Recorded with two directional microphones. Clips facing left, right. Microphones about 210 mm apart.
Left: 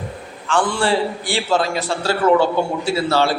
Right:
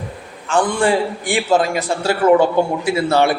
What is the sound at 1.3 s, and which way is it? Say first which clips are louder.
A man's voice: right 4 dB; 15° right (ahead or behind).